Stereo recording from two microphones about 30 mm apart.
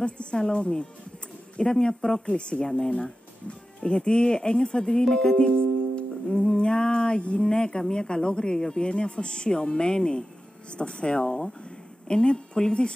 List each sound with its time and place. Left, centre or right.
0.0 s speech: left
2.6 s speech: left
2.9 s speech: left
5.3 s music: left
7.9 s speech: left